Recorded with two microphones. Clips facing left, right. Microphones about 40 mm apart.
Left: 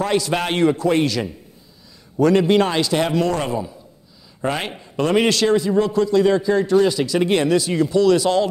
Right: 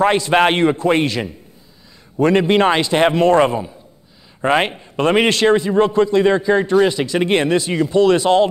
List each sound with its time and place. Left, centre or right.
0.0 s a man's voice: right